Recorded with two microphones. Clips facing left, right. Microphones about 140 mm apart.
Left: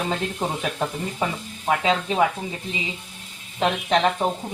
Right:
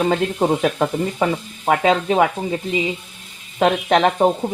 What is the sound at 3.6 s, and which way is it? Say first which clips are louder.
Speech: right 5 dB; 65° right (ahead or behind).